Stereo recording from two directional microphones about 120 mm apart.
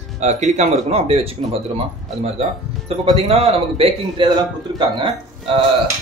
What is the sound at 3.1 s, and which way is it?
Speech, 55° right (ahead or behind).